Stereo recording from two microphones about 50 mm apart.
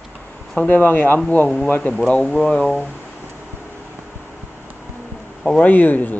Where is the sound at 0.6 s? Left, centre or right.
Left.